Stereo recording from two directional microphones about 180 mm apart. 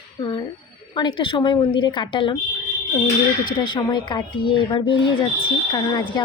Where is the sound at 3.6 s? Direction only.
25° left (ahead or behind).